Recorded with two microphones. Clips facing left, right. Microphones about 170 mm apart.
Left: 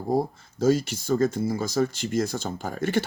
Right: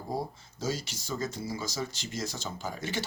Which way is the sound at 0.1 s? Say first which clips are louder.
Left 10 dB; 55° left (ahead or behind).